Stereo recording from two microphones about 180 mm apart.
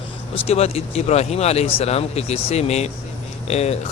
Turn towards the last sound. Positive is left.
turn(degrees=35)  # may be behind; listen again after turning